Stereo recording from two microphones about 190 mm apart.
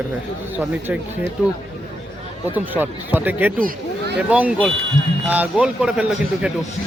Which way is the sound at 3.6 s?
50° right (ahead or behind).